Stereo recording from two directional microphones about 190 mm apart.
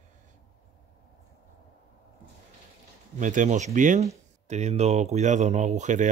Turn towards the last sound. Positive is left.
turn(degrees=-40)  # may be behind; listen again after turning